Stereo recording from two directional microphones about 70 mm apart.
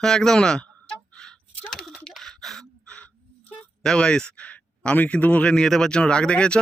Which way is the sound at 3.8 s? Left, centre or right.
Centre.